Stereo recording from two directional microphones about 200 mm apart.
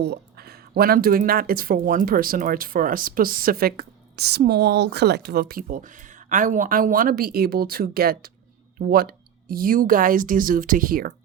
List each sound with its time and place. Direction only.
0.0 s speech: 55° right (ahead or behind)